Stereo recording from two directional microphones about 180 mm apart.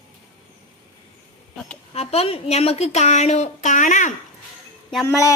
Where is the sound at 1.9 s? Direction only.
35° left (ahead or behind).